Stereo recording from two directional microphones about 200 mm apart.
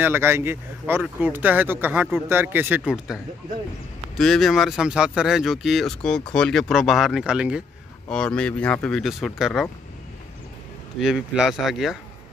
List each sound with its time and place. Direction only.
0.0 s speech: 10° right (ahead or behind)
4.2 s speech: centre (ahead or behind)
11.0 s speech: 5° right (ahead or behind)